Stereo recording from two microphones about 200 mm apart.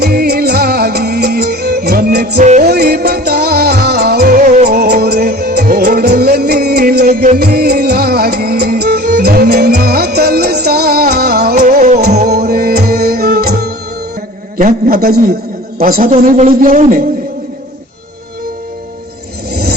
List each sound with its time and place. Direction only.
0.0 s music: 50° right (ahead or behind)
2.4 s music: 40° right (ahead or behind)
2.6 s music: 50° right (ahead or behind)
4.7 s music: 50° right (ahead or behind)
12.3 s music: 50° right (ahead or behind)
14.6 s a man's voice: 45° right (ahead or behind)